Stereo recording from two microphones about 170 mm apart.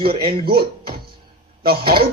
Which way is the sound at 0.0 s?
30° right (ahead or behind).